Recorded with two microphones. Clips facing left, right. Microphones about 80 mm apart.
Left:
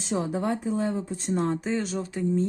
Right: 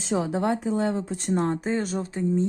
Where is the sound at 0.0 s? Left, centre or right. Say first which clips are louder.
Right 3 dB; right.